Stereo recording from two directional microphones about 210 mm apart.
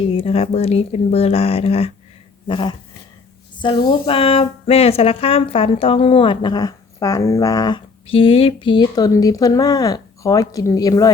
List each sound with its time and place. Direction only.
0.0 s a woman's voice: 25° left (ahead or behind)